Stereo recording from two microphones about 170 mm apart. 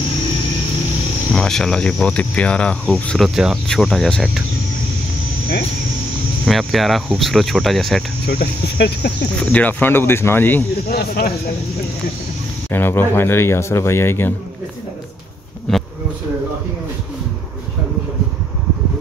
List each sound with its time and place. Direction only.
1.3 s speech: 5° left (ahead or behind)
6.4 s speech: centre (ahead or behind)
8.3 s speech: 70° left (ahead or behind)
9.5 s speech: 10° left (ahead or behind)
10.9 s speech: 65° left (ahead or behind)
12.7 s speech: 10° left (ahead or behind)
15.7 s a sound: 5° left (ahead or behind)